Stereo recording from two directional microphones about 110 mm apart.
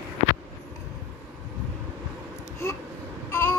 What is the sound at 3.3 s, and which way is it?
Vehicle, 20° left (ahead or behind).